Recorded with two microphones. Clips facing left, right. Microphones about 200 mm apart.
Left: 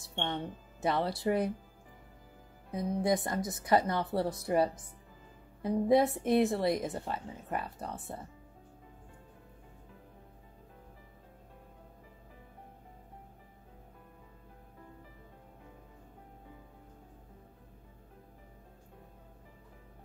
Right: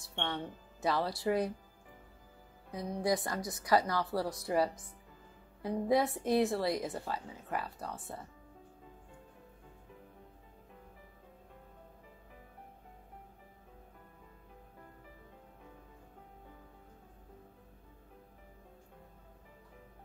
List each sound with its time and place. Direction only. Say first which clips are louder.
0.0 s speech: left 2 dB; 25° left (ahead or behind)
3.0 s speech: left 2 dB; 25° left (ahead or behind)